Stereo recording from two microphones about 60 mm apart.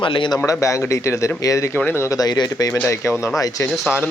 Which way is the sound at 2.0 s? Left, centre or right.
Left.